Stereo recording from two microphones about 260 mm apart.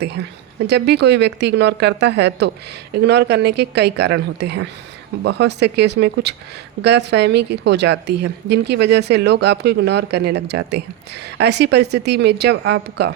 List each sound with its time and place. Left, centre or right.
0.2 s a woman's voice: right